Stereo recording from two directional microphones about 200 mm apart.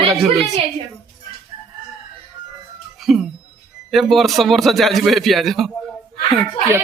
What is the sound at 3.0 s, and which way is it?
A man's voice, centre (ahead or behind).